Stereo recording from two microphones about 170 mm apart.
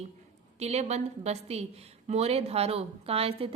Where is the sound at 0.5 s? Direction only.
40° right (ahead or behind).